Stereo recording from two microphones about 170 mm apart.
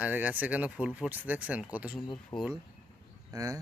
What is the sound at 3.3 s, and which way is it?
Speech, 20° right (ahead or behind).